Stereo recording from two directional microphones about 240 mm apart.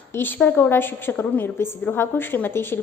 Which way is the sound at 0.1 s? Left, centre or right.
Centre.